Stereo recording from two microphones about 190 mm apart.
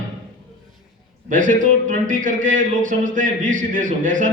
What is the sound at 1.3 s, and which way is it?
A man's voice, 45° right (ahead or behind).